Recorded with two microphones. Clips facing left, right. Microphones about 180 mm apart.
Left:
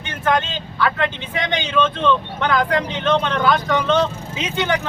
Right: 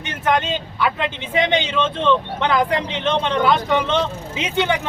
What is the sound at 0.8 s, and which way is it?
Speech, 15° right (ahead or behind).